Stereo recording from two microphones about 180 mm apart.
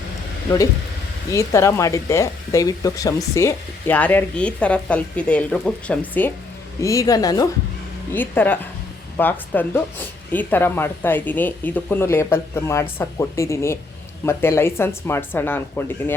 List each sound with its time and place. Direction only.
1.3 s a woman's voice: 15° left (ahead or behind)